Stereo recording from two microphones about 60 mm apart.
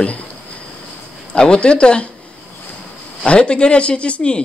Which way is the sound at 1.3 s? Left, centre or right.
Centre.